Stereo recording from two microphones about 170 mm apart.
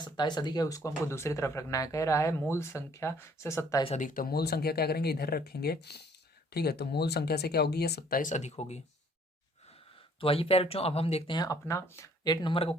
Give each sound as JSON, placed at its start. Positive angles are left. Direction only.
{"t": 0.0, "sound": "speech", "side_deg": 25}
{"t": 3.8, "sound": "speech", "side_deg": 45}
{"t": 8.2, "sound": "speech", "side_deg": 45}
{"t": 10.2, "sound": "speech", "side_deg": 35}